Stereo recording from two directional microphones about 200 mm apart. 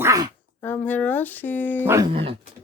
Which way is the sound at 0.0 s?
15° right (ahead or behind).